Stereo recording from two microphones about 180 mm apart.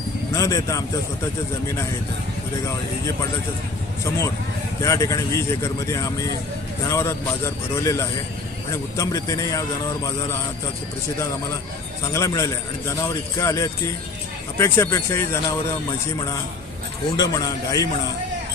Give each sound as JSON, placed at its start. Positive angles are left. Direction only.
{"t": 0.3, "sound": "speech", "side_deg": 20}
{"t": 4.8, "sound": "speech", "side_deg": 15}
{"t": 12.1, "sound": "speech", "side_deg": 15}
{"t": 17.2, "sound": "speech", "side_deg": 20}